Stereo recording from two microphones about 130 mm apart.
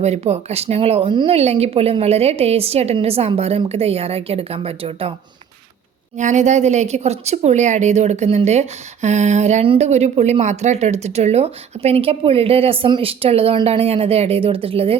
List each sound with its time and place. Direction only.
0.0 s speech: 55° right (ahead or behind); by 1.4 s 40° right (ahead or behind)
1.4 s speech: 55° right (ahead or behind)
6.1 s speech: 65° right (ahead or behind); by 14.9 s 45° right (ahead or behind)